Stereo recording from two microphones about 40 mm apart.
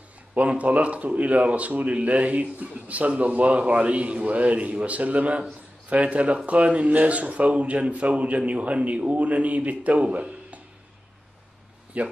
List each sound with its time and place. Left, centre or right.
0.3 s speech: right
11.9 s speech: right